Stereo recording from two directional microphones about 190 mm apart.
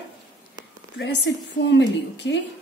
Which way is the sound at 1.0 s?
65° left (ahead or behind).